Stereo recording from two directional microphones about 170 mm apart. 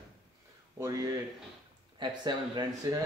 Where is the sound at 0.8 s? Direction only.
20° right (ahead or behind).